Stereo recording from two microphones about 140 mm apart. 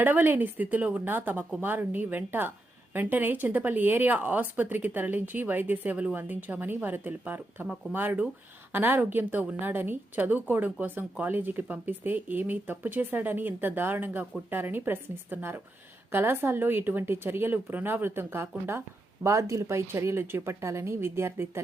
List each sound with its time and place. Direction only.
0.0 s a woman's voice: 15° right (ahead or behind)